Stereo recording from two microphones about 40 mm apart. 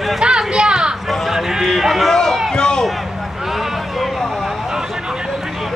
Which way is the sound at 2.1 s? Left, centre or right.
Centre.